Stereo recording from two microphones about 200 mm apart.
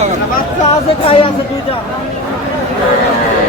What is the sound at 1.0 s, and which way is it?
Speech, 25° left (ahead or behind).